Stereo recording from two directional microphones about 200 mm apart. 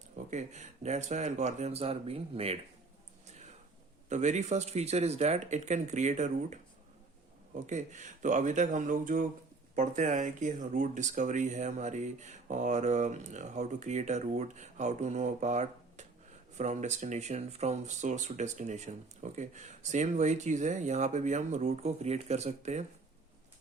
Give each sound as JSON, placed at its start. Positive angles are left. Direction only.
{"t": 0.3, "sound": "speech", "side_deg": -35}
{"t": 4.1, "sound": "speech", "side_deg": -35}